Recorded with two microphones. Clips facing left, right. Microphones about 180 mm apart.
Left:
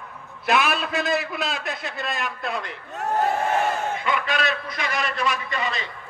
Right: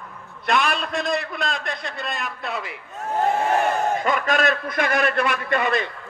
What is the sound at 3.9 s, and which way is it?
A man's voice, 45° right (ahead or behind).